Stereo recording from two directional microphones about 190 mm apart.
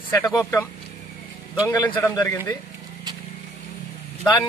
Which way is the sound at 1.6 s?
15° left (ahead or behind).